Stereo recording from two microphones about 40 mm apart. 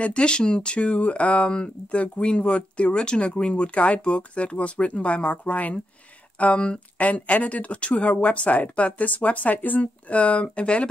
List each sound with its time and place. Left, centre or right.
0.0 s speech: left